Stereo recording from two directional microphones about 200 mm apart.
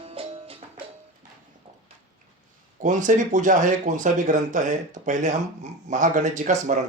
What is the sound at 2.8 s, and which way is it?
Speech, 40° right (ahead or behind).